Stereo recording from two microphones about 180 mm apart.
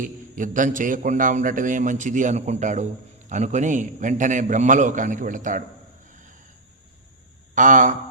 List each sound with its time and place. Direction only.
0.0 s a man's voice: 45° right (ahead or behind)
6.1 s cricket: 45° right (ahead or behind)
7.5 s speech: 45° right (ahead or behind)